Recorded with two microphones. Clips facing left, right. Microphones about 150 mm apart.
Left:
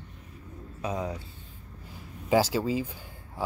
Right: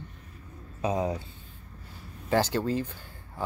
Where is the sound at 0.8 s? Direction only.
30° right (ahead or behind).